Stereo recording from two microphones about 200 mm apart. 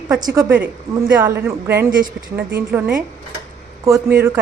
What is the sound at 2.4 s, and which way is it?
Speech, 55° right (ahead or behind).